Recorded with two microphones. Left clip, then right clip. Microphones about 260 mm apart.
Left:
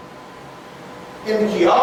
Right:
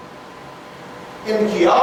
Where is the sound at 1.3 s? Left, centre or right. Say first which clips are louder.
Even; centre.